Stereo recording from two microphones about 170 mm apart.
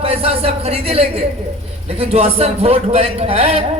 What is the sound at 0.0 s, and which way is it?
Speech, 35° right (ahead or behind).